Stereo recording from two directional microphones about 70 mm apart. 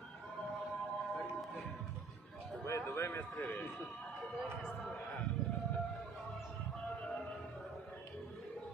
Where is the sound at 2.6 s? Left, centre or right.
Left.